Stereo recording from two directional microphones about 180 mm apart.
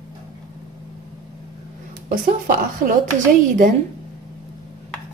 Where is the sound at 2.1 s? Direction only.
50° right (ahead or behind).